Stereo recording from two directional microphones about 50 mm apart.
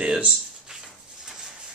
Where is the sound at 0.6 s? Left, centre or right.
Centre.